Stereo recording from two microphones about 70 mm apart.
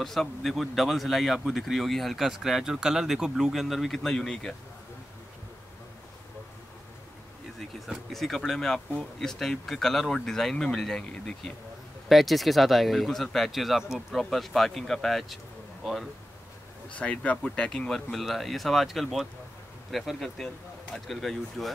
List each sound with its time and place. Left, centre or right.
0.0 s speech: centre
7.8 s speech: centre
12.1 s speech: centre
16.9 s speech: centre